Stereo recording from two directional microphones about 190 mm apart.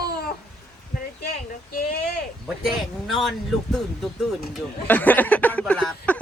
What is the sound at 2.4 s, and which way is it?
Speech, centre (ahead or behind).